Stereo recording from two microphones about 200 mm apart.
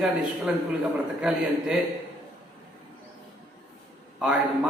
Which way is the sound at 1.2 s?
5° right (ahead or behind).